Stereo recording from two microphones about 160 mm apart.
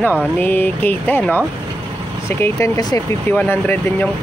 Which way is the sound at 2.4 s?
20° left (ahead or behind).